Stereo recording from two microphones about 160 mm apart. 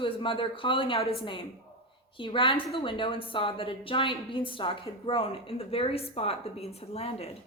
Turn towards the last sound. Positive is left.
turn(degrees=40)  # may be behind; listen again after turning